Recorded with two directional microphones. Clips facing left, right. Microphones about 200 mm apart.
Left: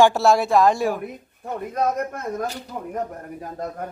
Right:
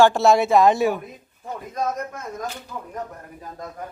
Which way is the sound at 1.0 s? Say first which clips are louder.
Left 6 dB; 60° left (ahead or behind).